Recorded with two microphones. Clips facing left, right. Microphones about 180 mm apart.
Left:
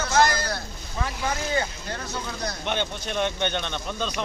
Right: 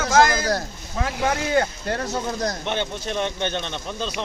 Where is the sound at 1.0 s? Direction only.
70° right (ahead or behind).